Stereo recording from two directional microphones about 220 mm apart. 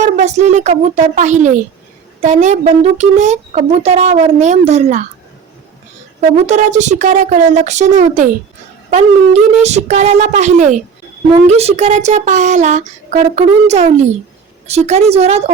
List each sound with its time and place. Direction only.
0.0 s speech: 30° right (ahead or behind)
6.1 s speech: 30° right (ahead or behind)
9.6 s a woman's voice: 30° right (ahead or behind)